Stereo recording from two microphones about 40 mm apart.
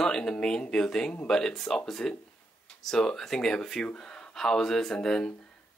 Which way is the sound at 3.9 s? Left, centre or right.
Left.